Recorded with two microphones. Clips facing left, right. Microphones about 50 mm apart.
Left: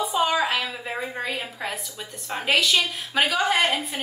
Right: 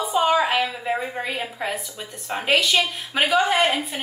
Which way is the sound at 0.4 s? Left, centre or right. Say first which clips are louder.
Right 3 dB; centre.